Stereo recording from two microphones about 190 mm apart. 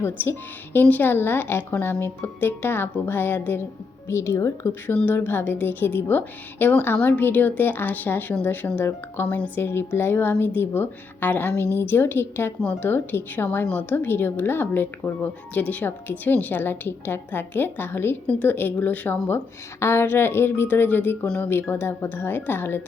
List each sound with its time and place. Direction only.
0.0 s a woman's voice: 10° left (ahead or behind)